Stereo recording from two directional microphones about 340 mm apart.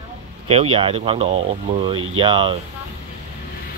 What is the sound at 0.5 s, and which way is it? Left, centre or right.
Speech, centre.